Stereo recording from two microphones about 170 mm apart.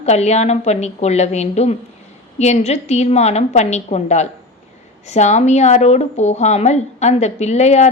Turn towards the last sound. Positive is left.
turn(degrees=40)  # may be behind; listen again after turning